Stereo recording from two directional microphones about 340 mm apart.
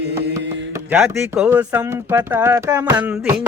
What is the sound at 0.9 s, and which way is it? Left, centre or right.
Speech, centre.